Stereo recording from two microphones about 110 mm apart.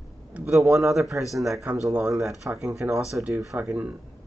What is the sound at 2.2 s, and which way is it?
Speech, centre (ahead or behind).